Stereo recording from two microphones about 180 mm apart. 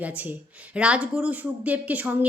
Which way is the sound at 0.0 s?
10° right (ahead or behind).